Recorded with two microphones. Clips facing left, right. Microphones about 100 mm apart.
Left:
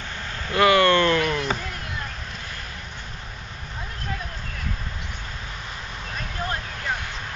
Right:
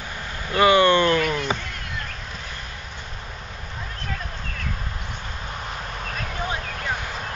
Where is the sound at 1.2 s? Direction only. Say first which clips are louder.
Even; centre (ahead or behind).